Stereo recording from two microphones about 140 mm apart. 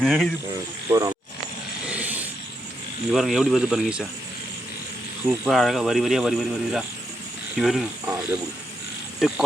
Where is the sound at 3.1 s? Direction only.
Centre (ahead or behind).